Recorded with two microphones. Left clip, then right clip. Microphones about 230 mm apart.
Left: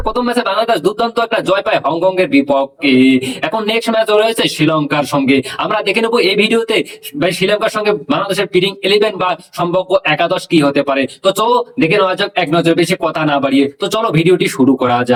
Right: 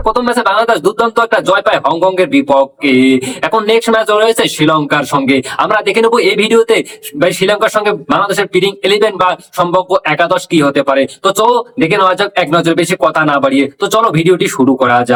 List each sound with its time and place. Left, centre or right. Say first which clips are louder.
0.1 s speech: right 4 dB; centre